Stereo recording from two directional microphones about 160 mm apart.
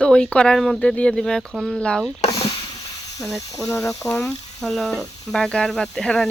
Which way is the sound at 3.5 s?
20° left (ahead or behind).